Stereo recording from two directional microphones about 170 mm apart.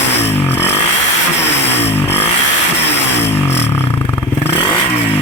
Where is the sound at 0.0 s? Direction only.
90° left.